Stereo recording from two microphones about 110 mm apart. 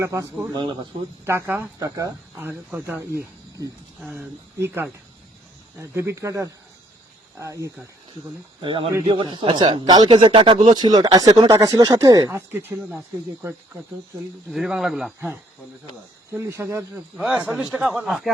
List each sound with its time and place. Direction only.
0.0 s speech: 30° right (ahead or behind)
0.5 s speech: 45° right (ahead or behind)
1.2 s speech: 20° right (ahead or behind)
1.8 s speech: 30° right (ahead or behind)
2.6 s speech: 20° right (ahead or behind)
4.0 s speech: 10° right (ahead or behind)
4.5 s speech: 25° right (ahead or behind)
8.6 s speech: 50° right (ahead or behind); by 12.4 s 30° right (ahead or behind)
12.5 s speech: 20° right (ahead or behind)
14.5 s speech: centre (ahead or behind)
16.3 s speech: 25° right (ahead or behind)
17.2 s speech: 10° right (ahead or behind)